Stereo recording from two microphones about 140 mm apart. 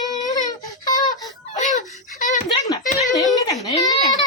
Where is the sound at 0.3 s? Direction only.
25° left (ahead or behind).